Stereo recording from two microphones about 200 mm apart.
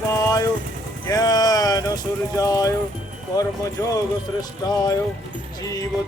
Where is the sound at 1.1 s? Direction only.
20° left (ahead or behind).